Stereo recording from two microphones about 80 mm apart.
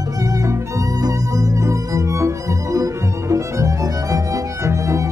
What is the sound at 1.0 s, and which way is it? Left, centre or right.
Violin, right.